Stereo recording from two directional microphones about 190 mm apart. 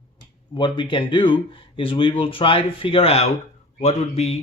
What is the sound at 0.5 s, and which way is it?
Speech, 25° left (ahead or behind).